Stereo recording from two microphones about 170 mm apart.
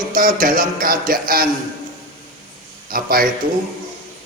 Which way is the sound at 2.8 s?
60° right (ahead or behind).